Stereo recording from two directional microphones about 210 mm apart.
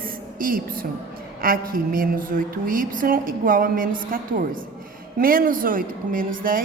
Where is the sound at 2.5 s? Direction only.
40° right (ahead or behind).